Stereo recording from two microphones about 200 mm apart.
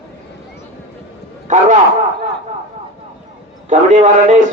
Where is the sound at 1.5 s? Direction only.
35° right (ahead or behind).